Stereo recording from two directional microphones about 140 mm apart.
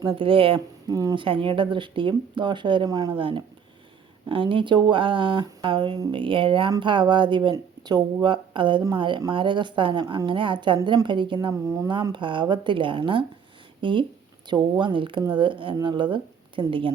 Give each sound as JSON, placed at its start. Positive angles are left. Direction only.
{"t": 0.2, "sound": "speech", "side_deg": -40}
{"t": 0.9, "sound": "speech", "side_deg": -25}
{"t": 1.2, "sound": "speech", "side_deg": -35}
{"t": 11.3, "sound": "speech", "side_deg": -25}
{"t": 12.1, "sound": "speech", "side_deg": -35}